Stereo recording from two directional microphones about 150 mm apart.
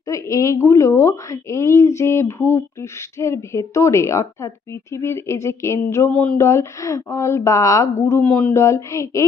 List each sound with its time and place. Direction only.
0.0 s a woman's voice: 20° left (ahead or behind)
6.1 s a sound: 10° left (ahead or behind)
6.3 s a woman's voice: 20° left (ahead or behind)